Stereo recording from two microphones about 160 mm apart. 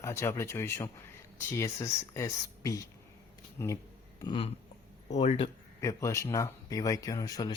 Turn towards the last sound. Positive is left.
turn(degrees=25)  # may be behind; listen again after turning